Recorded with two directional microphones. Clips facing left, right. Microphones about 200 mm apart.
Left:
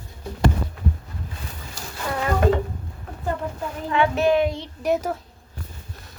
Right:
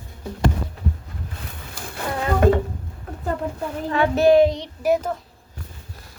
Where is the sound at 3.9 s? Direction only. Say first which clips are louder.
Right 4 dB; 35° right (ahead or behind).